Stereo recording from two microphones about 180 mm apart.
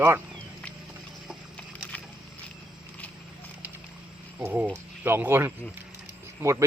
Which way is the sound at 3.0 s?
10° left (ahead or behind).